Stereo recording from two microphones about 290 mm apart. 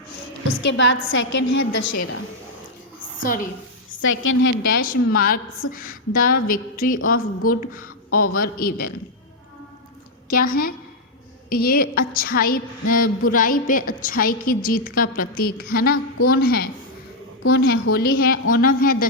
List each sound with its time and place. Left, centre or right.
0.4 s a woman's voice: left
1.5 s a woman's voice: left
4.0 s a woman's voice: left
4.6 s a woman's voice: left
10.2 s a woman's voice: left